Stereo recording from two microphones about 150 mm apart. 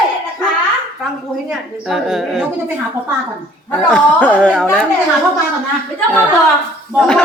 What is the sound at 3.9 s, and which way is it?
Speech, 10° left (ahead or behind).